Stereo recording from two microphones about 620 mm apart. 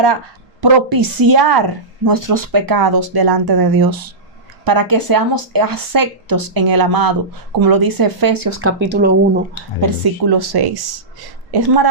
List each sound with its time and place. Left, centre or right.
0.6 s a woman's voice: right
8.6 s speech: centre
9.8 s a woman's voice: right